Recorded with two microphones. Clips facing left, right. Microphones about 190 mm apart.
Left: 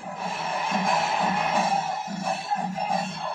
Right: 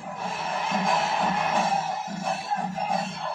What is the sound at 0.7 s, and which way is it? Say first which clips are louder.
Music: even; 5° left (ahead or behind).